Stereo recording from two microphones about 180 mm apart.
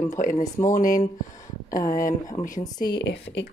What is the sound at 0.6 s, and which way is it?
A woman's voice, 50° left (ahead or behind).